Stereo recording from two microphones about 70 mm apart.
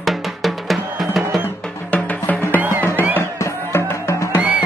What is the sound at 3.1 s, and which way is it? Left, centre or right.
Music, left.